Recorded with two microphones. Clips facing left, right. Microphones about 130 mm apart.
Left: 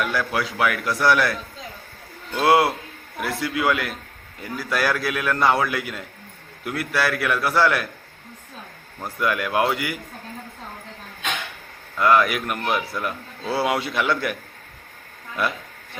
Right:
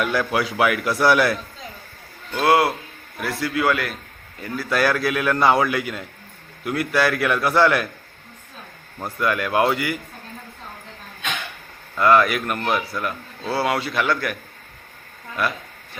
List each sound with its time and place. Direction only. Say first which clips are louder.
0.0 s a man's voice: right 3 dB; centre (ahead or behind)
2.3 s a man's voice: even; 25° left (ahead or behind); by 7.9 s centre (ahead or behind)
9.1 s a man's voice: right 2 dB; 5° left (ahead or behind)
11.9 s speech: right 2 dB; 5° left (ahead or behind)
13.4 s speech: even; centre (ahead or behind)
13.7 s speech: right 1 dB; 15° left (ahead or behind)